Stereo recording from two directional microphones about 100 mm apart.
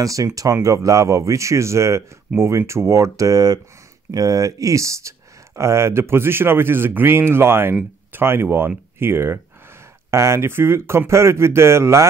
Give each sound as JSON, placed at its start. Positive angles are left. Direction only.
{"t": 0.0, "sound": "speech", "side_deg": -35}